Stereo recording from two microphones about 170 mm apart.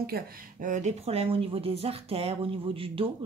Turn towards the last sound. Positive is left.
turn(degrees=-30)  # may be behind; listen again after turning